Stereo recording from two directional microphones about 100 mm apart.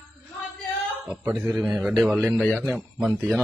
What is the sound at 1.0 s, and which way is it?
A man's voice, 15° right (ahead or behind).